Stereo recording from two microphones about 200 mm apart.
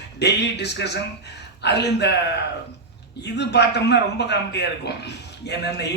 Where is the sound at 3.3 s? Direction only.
60° left (ahead or behind).